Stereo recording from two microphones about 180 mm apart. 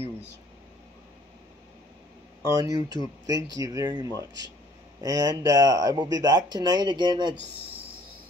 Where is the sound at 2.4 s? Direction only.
20° right (ahead or behind).